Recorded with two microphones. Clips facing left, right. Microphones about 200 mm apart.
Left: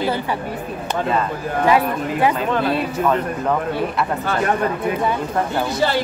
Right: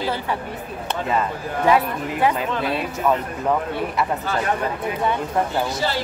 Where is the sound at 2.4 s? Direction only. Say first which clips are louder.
Left 4 dB; 55° left (ahead or behind).